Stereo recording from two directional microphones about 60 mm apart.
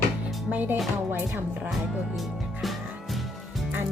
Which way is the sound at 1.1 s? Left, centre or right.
Right.